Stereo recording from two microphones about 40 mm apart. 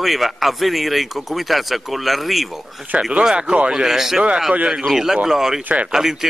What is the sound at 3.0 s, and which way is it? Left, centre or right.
Speech, right.